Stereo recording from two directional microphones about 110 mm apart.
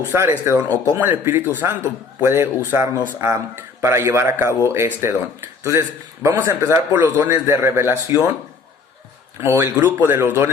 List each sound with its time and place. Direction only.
0.1 s speech: 20° right (ahead or behind)
6.2 s speech: 25° right (ahead or behind)
9.4 s speech: 25° right (ahead or behind)